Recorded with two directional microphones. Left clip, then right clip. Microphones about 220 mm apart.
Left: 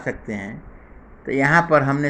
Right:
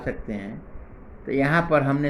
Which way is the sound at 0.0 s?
25° left (ahead or behind).